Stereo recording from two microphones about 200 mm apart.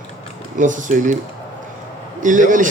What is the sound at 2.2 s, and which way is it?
Speech, 40° right (ahead or behind).